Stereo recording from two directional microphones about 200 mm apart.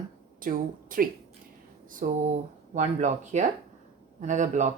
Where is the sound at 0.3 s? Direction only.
45° right (ahead or behind).